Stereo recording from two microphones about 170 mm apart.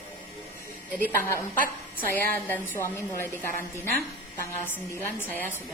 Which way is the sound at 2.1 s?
10° left (ahead or behind).